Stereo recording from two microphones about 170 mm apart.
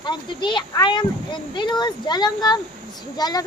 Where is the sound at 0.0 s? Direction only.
25° left (ahead or behind).